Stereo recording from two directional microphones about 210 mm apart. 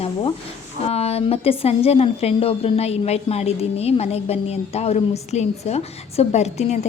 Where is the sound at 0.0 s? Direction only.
25° left (ahead or behind).